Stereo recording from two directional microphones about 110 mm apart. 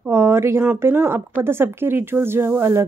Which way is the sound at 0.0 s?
25° right (ahead or behind).